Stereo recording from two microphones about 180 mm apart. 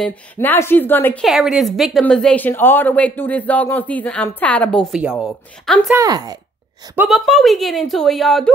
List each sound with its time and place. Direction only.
0.0 s a woman's voice: 10° left (ahead or behind)
1.2 s a woman's voice: centre (ahead or behind)
5.9 s speech: 20° right (ahead or behind)
7.0 s speech: centre (ahead or behind)